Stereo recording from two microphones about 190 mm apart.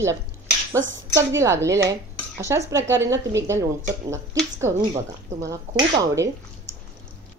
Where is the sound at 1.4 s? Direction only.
15° right (ahead or behind).